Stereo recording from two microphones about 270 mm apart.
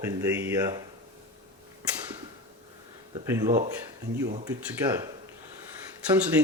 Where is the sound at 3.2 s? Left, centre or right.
Centre.